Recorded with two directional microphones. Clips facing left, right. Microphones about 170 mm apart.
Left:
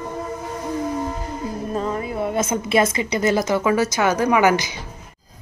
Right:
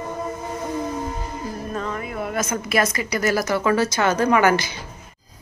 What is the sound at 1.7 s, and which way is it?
A woman's voice, 30° left (ahead or behind).